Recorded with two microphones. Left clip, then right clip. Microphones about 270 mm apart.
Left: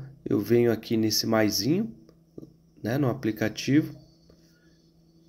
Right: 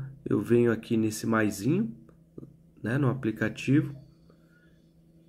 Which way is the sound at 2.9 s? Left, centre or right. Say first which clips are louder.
Left 2 dB; left.